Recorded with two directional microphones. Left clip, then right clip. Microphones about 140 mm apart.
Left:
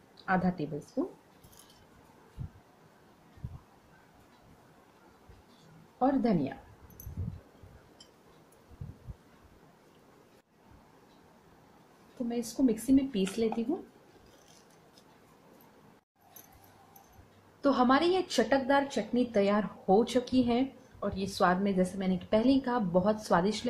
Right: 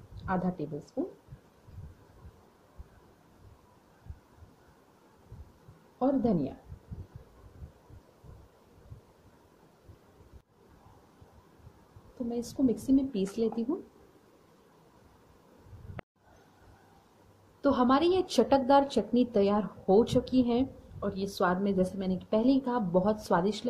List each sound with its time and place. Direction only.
0.2 s a woman's voice: 5° right (ahead or behind)
5.9 s a woman's voice: 5° right (ahead or behind)
12.3 s a woman's voice: centre (ahead or behind)
17.6 s a woman's voice: 10° right (ahead or behind); by 19.2 s 25° right (ahead or behind)
19.3 s a woman's voice: 15° right (ahead or behind)